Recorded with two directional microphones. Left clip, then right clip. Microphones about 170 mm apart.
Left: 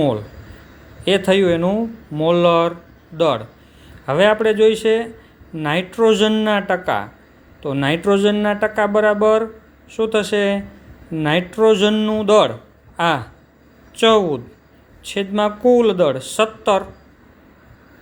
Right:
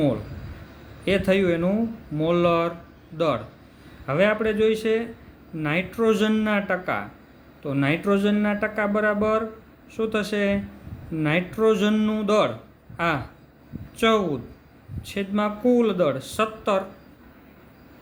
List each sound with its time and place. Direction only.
1.0 s speech: 25° left (ahead or behind)